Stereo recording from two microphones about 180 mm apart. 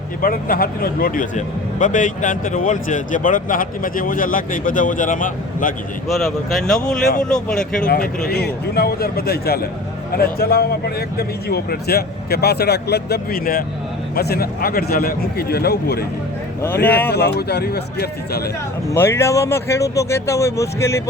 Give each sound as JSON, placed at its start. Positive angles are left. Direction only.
{"t": 0.2, "sound": "speech", "side_deg": 50}
{"t": 6.1, "sound": "speech", "side_deg": 0}
{"t": 7.9, "sound": "a man's voice", "side_deg": 55}
{"t": 17.1, "sound": "a man's voice", "side_deg": 65}
{"t": 18.9, "sound": "speech", "side_deg": 15}